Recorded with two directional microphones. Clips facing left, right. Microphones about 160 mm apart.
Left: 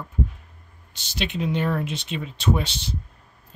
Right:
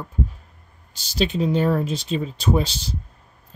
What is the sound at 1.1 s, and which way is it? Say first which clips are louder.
Speech: right 5 dB; 35° right (ahead or behind).